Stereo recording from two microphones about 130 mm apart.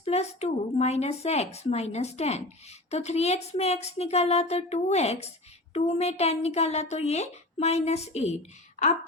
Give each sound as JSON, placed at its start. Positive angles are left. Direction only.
{"t": 0.0, "sound": "speech", "side_deg": 55}